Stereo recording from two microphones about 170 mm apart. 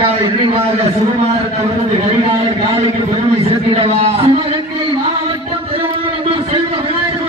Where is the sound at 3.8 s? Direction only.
35° right (ahead or behind).